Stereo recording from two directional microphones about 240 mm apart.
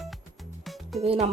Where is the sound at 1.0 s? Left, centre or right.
Right.